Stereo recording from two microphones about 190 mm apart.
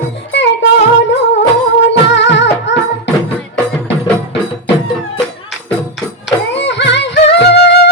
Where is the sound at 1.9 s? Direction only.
70° left (ahead or behind).